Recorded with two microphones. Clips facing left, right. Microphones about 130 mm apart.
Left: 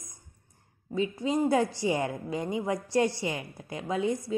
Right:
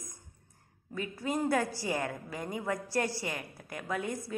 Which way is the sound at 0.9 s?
20° left (ahead or behind).